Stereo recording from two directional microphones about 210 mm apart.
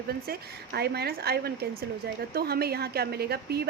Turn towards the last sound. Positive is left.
turn(degrees=-50)  # may be behind; listen again after turning